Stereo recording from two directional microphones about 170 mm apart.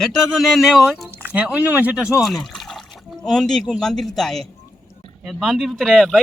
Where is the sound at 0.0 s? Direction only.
Centre (ahead or behind).